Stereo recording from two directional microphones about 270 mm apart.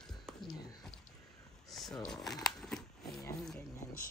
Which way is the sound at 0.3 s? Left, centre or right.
Centre.